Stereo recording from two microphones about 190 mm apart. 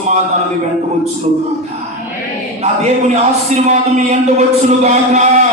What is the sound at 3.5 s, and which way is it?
Speech, 35° right (ahead or behind).